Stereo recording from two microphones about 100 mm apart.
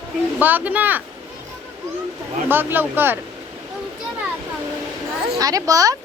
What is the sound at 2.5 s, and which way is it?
Speech, 20° right (ahead or behind).